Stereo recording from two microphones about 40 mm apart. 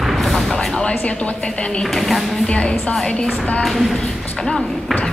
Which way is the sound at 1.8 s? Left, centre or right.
Centre.